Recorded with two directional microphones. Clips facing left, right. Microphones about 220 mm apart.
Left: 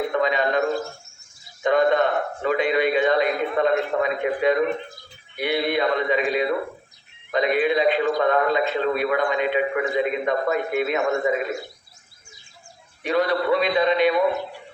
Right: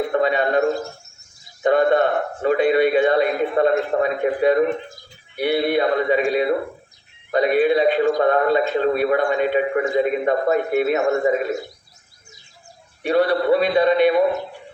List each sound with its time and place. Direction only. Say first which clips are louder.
0.1 s a man's voice: right 3 dB; 35° right (ahead or behind)
13.1 s a man's voice: right 4 dB; 35° right (ahead or behind)